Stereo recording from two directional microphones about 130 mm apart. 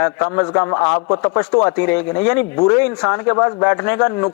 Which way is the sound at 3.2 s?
25° left (ahead or behind).